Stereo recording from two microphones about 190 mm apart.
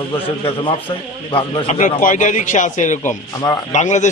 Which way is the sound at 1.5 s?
40° left (ahead or behind).